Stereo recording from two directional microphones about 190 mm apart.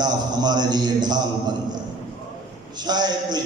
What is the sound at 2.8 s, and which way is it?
Speech, 20° right (ahead or behind).